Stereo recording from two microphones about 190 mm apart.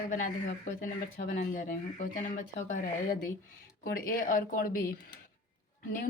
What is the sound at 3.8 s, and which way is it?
Speech, 50° left (ahead or behind).